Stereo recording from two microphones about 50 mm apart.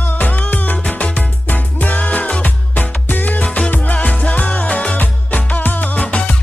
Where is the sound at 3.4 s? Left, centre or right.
Left.